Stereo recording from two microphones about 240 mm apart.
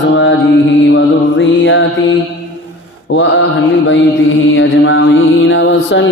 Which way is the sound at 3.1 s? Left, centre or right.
Left.